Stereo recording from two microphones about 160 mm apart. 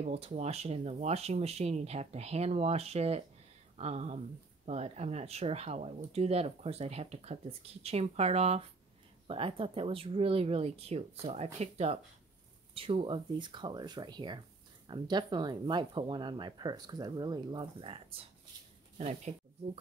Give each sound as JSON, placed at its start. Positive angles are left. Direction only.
{"t": 0.0, "sound": "speech", "side_deg": -45}